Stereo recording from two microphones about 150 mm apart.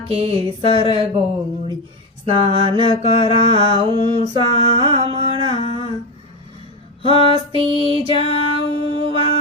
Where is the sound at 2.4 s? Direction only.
40° right (ahead or behind).